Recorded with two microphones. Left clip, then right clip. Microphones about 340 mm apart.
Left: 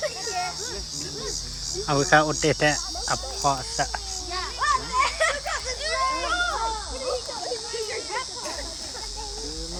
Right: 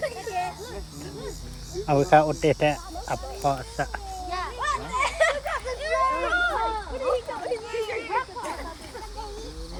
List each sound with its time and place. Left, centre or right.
1.9 s speech: centre
4.3 s children playing: centre